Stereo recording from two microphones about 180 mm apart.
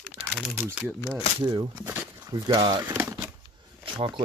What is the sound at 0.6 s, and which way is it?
Speech, 15° right (ahead or behind).